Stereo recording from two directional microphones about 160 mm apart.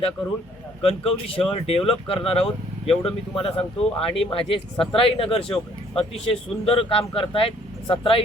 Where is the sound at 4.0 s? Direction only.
35° left (ahead or behind).